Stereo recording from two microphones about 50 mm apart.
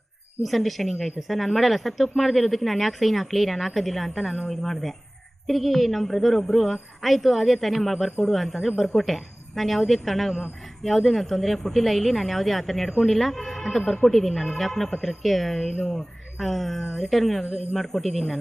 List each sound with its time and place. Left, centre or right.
0.4 s speech: centre
17.4 s speech: right
17.7 s speech: centre